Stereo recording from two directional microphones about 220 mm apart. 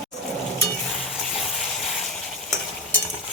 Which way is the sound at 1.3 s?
Centre (ahead or behind).